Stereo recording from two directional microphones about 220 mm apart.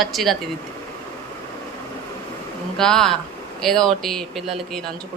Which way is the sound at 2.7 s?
5° left (ahead or behind).